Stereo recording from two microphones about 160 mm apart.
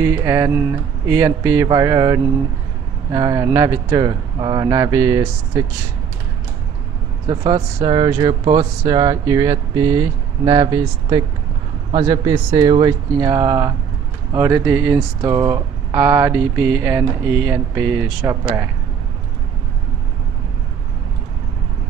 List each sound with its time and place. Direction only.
0.0 s speech: 15° right (ahead or behind)
7.2 s speech: 25° right (ahead or behind)